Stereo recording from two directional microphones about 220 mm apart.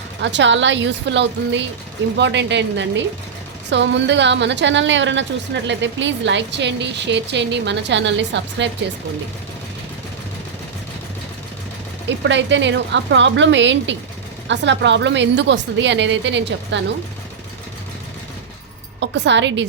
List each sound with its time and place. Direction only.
0.2 s a woman's voice: 55° right (ahead or behind)
12.0 s a woman's voice: 55° right (ahead or behind)
18.9 s a woman's voice: 55° right (ahead or behind)